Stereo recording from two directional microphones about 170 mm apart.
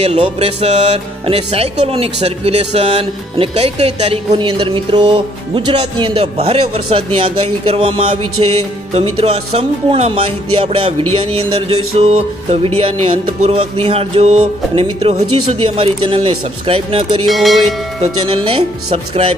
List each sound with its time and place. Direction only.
0.0 s music: 40° right (ahead or behind)
17.3 s speech: centre (ahead or behind)
18.0 s music: 30° right (ahead or behind)